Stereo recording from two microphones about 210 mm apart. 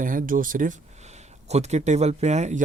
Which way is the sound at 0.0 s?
40° right (ahead or behind).